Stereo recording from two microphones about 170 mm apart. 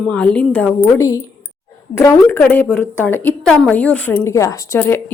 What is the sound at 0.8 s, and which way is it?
A woman's voice, 15° left (ahead or behind).